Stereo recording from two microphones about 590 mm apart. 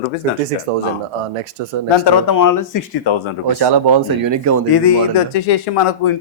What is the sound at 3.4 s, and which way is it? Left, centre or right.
Speech, right.